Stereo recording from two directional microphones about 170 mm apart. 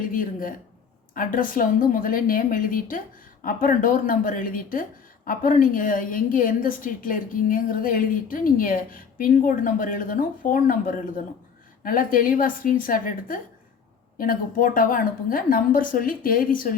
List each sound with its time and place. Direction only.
0.1 s speech: 55° left (ahead or behind)